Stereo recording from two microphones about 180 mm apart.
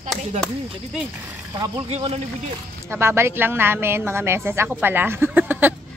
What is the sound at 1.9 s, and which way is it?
Speech, 35° right (ahead or behind).